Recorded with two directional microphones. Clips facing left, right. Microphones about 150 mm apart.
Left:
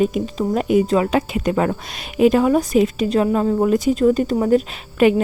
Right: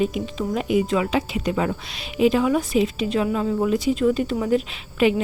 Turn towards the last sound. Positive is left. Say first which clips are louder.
# left 4 dB
turn(degrees=45)  # may be behind; listen again after turning